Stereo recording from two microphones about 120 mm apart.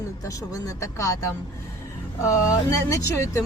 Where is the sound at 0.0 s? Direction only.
25° left (ahead or behind).